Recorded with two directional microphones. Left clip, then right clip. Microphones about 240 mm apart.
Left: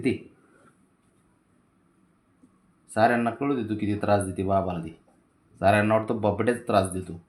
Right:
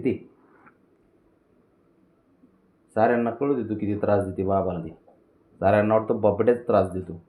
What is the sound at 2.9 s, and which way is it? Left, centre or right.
Speech, left.